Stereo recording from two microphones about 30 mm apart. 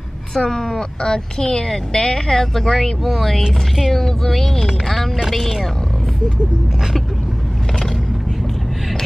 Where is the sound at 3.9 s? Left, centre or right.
Centre.